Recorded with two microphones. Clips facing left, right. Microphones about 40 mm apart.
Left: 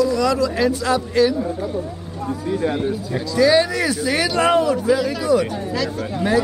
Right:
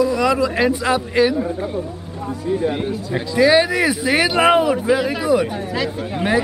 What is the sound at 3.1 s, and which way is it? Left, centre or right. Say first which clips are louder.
Speech: right 2 dB; right.